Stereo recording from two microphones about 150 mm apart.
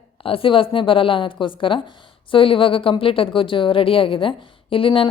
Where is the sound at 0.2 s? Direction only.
35° left (ahead or behind).